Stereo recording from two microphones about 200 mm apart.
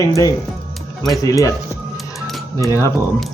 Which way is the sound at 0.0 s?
15° left (ahead or behind).